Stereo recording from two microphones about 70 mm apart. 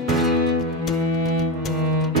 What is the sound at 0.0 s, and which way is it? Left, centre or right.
Music, centre.